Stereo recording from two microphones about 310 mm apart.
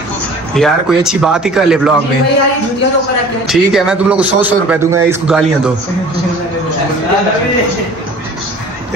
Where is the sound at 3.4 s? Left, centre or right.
Centre.